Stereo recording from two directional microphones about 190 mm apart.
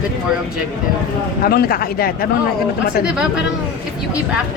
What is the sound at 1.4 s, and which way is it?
Speech, 50° left (ahead or behind).